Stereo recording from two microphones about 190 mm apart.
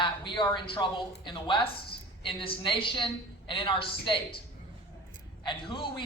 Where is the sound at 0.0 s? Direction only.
25° left (ahead or behind).